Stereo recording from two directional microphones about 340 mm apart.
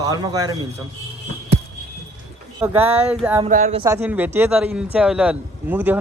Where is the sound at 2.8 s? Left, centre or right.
Centre.